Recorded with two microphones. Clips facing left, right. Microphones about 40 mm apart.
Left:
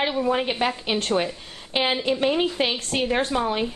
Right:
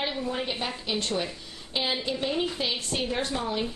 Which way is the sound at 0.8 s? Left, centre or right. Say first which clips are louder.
Left 6 dB; left.